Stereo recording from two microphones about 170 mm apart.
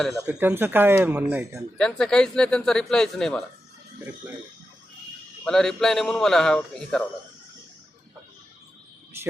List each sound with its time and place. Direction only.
0.3 s speech: 10° right (ahead or behind)
1.5 s speech: 5° left (ahead or behind)
5.5 s speech: 5° left (ahead or behind)
9.1 s speech: 15° right (ahead or behind)